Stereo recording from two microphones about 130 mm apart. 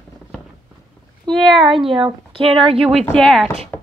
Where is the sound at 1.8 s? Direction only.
40° right (ahead or behind).